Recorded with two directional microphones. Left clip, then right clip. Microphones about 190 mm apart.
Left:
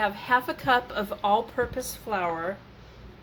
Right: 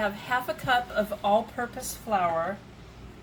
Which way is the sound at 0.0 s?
35° left (ahead or behind).